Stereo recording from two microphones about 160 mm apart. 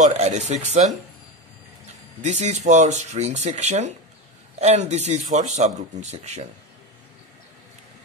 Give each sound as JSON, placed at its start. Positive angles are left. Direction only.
{"t": 0.0, "sound": "speech", "side_deg": -45}
{"t": 2.2, "sound": "speech", "side_deg": -45}